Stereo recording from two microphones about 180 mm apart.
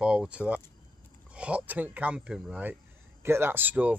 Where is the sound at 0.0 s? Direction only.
5° right (ahead or behind).